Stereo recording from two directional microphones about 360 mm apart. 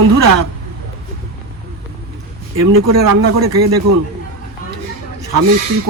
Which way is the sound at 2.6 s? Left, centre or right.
Right.